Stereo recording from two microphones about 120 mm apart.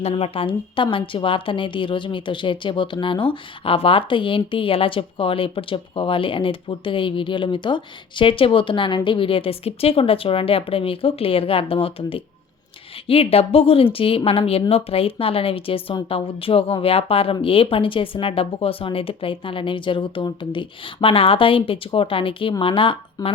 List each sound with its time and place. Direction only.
0.0 s a woman's voice: 55° left (ahead or behind)
23.2 s speech: 30° left (ahead or behind)